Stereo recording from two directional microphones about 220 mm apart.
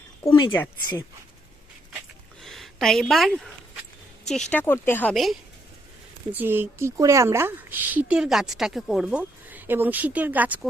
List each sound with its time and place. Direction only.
0.3 s speech: 20° left (ahead or behind)
2.4 s a woman's voice: centre (ahead or behind)